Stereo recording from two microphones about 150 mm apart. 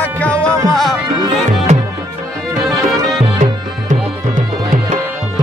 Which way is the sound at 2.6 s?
Centre (ahead or behind).